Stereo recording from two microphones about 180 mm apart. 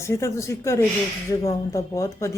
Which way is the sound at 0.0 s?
15° left (ahead or behind).